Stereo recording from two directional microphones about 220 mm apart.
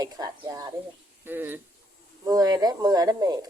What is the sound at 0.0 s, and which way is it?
Speech, 15° right (ahead or behind).